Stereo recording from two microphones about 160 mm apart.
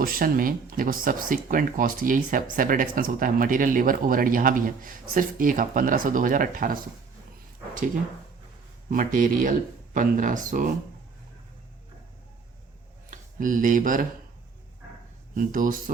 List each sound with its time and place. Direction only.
0.0 s speech: 65° right (ahead or behind)
8.9 s speech: 55° right (ahead or behind)
13.1 s speech: 55° right (ahead or behind)
15.4 s speech: 60° right (ahead or behind)